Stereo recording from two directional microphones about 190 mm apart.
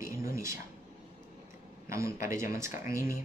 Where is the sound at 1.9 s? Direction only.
15° right (ahead or behind).